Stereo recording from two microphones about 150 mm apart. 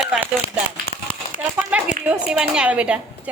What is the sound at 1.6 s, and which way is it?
A woman's voice, 10° right (ahead or behind).